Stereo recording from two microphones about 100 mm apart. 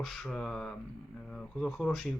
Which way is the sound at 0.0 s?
5° left (ahead or behind).